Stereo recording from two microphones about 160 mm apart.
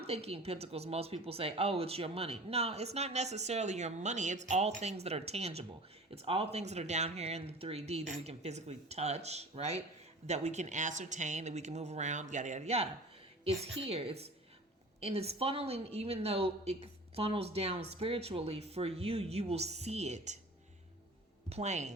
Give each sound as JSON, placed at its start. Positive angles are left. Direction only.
{"t": 0.0, "sound": "speech", "side_deg": -40}
{"t": 21.5, "sound": "speech", "side_deg": -45}